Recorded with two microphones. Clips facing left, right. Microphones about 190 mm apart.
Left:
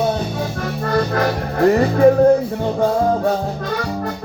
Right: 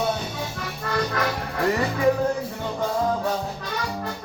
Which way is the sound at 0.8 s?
40° left (ahead or behind).